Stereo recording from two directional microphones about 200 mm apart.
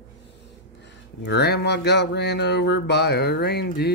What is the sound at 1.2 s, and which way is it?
Speech, 55° left (ahead or behind).